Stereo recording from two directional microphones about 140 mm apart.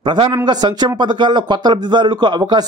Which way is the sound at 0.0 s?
35° right (ahead or behind).